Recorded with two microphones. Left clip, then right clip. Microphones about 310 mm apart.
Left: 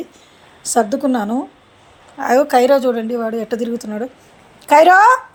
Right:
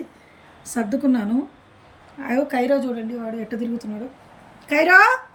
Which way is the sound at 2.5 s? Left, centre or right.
Centre.